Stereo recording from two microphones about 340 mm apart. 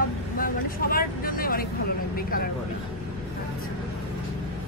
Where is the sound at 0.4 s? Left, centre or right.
Left.